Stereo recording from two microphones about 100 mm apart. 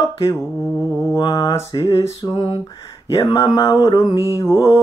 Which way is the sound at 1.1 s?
45° left (ahead or behind).